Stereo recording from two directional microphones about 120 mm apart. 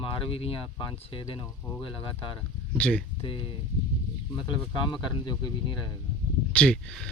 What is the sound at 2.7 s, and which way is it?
Speech, 10° left (ahead or behind).